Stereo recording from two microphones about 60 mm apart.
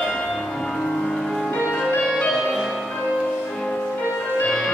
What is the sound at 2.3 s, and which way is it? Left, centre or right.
Music, centre.